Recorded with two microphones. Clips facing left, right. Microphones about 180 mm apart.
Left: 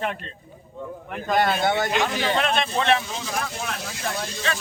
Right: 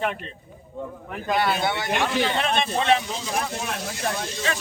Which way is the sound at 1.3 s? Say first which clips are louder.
Left 3 dB; 50° left (ahead or behind).